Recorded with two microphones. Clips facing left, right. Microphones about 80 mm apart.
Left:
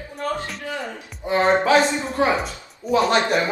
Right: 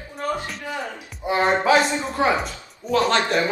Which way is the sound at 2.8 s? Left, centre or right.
Centre.